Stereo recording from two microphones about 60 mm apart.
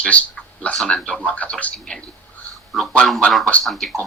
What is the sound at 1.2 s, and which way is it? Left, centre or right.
Speech, left.